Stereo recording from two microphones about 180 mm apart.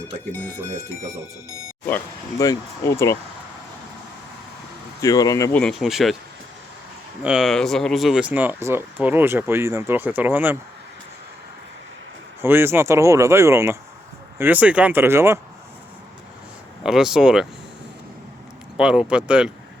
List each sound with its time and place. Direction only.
2.4 s speech: 20° left (ahead or behind)
4.9 s speech: 20° left (ahead or behind)
5.5 s speech: centre (ahead or behind)
7.2 s speech: 5° right (ahead or behind)
12.4 s speech: 15° right (ahead or behind)
16.8 s speech: 5° right (ahead or behind)
18.8 s speech: 5° right (ahead or behind)